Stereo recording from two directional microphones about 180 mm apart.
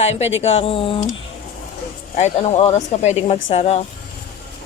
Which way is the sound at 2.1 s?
40° left (ahead or behind).